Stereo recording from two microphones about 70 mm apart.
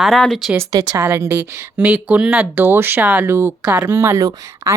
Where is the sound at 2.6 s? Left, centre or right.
Right.